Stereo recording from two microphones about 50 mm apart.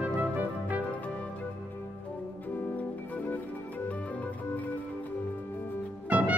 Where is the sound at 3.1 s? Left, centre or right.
Left.